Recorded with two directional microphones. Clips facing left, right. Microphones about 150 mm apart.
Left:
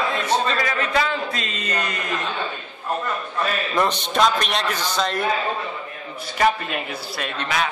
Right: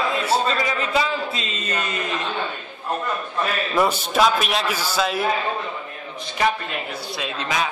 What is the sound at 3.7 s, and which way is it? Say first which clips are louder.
A man's voice: right 2 dB; 5° right (ahead or behind).